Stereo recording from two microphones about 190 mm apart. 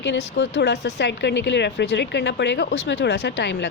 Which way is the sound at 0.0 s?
70° left (ahead or behind).